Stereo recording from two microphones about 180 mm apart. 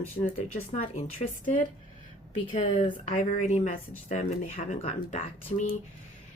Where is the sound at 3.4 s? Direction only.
45° left (ahead or behind).